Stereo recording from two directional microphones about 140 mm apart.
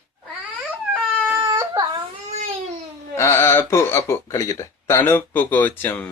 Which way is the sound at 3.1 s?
20° left (ahead or behind).